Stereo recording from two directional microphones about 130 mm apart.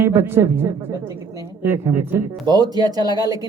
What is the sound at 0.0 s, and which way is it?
Speech, 15° right (ahead or behind).